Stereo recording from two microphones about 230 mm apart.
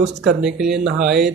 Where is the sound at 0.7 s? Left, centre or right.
Right.